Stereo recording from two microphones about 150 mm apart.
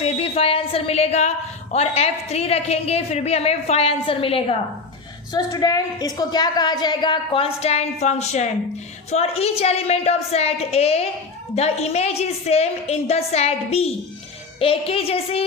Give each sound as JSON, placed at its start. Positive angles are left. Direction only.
{"t": 0.0, "sound": "a sound", "side_deg": 40}
{"t": 1.7, "sound": "a woman's voice", "side_deg": 45}
{"t": 5.3, "sound": "a woman's voice", "side_deg": 25}